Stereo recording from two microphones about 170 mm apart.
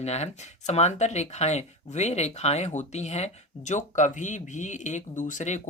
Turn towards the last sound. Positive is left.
turn(degrees=45)  # may be behind; listen again after turning